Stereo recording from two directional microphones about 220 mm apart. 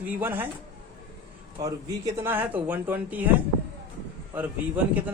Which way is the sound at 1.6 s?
15° right (ahead or behind).